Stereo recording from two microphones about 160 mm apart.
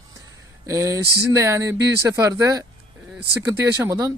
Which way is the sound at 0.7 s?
20° right (ahead or behind).